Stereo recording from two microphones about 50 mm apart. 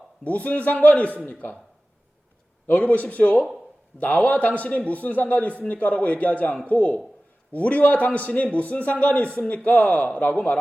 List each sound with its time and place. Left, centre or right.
0.3 s a man's voice: left
2.6 s a man's voice: left